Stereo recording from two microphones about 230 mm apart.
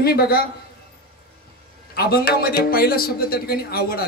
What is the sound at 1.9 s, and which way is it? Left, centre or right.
Music, left.